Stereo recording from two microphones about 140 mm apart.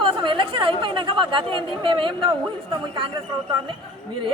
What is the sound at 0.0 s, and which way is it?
Speech, 35° right (ahead or behind).